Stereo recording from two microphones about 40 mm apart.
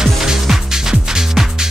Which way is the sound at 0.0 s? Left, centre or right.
Centre.